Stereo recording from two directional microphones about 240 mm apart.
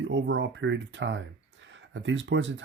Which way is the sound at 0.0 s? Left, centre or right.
Right.